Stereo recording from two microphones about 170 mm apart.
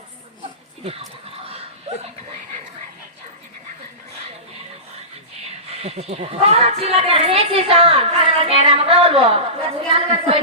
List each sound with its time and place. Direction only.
1.9 s speech: 40° right (ahead or behind)
5.7 s a woman's voice: 35° right (ahead or behind)